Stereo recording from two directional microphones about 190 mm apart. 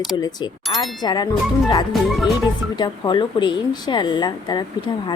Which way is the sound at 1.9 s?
Centre (ahead or behind).